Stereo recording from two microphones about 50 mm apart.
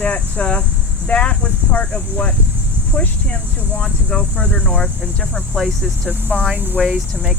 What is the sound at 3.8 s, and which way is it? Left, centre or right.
Speech, left.